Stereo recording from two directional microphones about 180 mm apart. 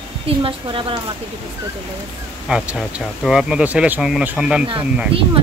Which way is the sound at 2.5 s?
5° right (ahead or behind).